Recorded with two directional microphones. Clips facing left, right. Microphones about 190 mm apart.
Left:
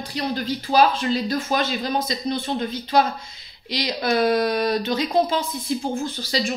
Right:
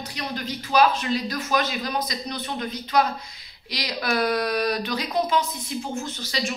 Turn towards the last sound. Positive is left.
turn(degrees=35)  # may be behind; listen again after turning